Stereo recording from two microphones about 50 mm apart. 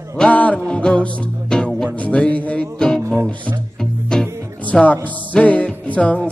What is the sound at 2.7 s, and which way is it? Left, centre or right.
Music, centre.